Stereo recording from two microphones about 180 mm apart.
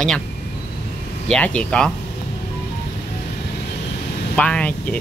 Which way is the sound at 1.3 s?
5° left (ahead or behind).